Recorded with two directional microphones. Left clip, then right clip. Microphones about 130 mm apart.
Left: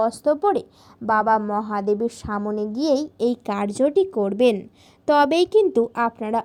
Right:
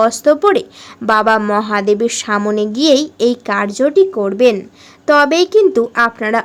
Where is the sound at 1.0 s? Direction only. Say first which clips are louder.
Right 7 dB; 25° right (ahead or behind).